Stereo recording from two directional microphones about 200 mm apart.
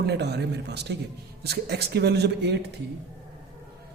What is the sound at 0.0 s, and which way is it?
A man's voice, 55° right (ahead or behind).